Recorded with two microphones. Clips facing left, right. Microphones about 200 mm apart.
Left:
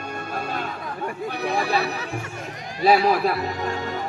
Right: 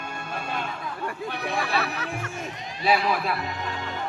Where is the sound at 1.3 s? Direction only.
40° left (ahead or behind).